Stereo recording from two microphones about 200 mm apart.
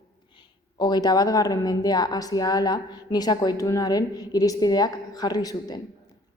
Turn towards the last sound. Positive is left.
turn(degrees=20)  # may be behind; listen again after turning